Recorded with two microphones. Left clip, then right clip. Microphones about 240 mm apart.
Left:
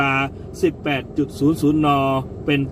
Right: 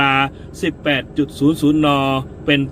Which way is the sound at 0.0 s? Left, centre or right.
Centre.